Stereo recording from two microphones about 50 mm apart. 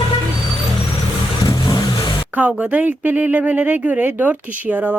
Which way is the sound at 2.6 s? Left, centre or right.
Right.